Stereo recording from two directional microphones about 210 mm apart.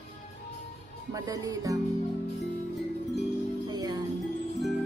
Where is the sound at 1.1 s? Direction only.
15° right (ahead or behind).